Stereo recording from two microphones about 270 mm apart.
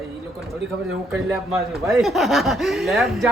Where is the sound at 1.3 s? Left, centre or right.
Centre.